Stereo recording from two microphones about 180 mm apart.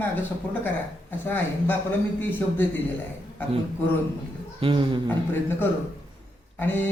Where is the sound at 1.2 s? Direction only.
10° left (ahead or behind).